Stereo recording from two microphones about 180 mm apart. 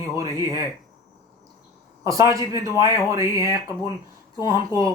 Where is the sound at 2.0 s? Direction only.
20° right (ahead or behind).